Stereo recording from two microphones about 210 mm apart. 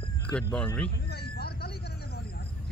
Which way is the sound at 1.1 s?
50° left (ahead or behind).